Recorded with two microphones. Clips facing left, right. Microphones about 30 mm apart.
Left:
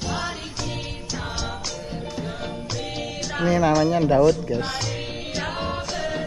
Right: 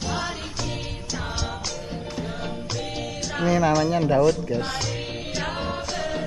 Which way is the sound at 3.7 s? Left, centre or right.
Centre.